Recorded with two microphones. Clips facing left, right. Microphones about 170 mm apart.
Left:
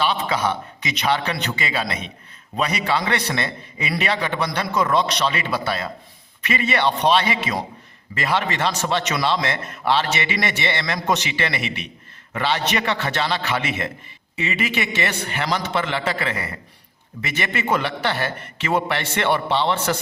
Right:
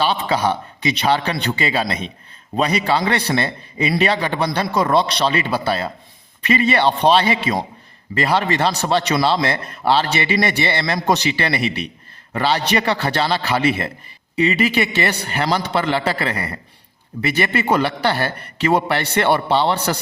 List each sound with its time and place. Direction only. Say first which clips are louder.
0.0 s a man's voice: right 3 dB; 35° right (ahead or behind)